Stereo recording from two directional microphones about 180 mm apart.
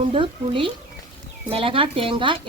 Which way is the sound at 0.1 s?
30° right (ahead or behind).